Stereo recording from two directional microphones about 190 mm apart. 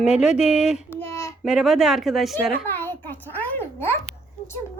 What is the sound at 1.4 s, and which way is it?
Speech, centre (ahead or behind).